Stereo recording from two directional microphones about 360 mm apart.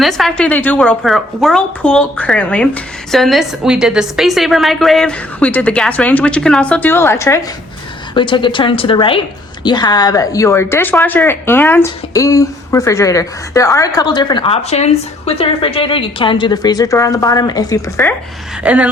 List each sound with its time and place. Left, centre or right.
0.0 s a woman's voice: centre
18.6 s a woman's voice: centre